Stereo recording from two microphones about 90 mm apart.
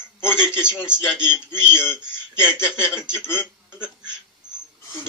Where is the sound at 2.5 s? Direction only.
10° right (ahead or behind).